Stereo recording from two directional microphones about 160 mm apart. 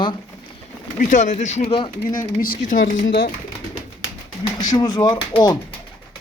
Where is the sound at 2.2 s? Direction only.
65° left (ahead or behind).